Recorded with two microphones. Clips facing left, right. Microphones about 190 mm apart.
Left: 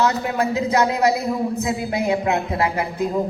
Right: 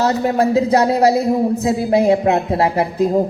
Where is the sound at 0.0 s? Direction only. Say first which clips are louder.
Right 5 dB; 35° right (ahead or behind).